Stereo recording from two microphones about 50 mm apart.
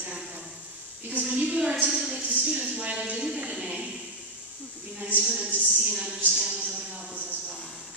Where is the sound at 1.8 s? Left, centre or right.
Centre.